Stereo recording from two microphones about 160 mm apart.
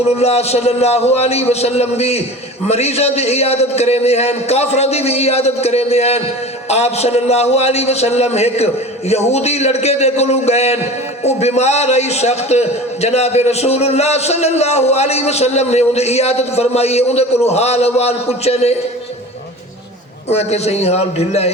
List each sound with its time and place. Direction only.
0.2 s a man's voice: 40° left (ahead or behind)
20.3 s a man's voice: 40° left (ahead or behind)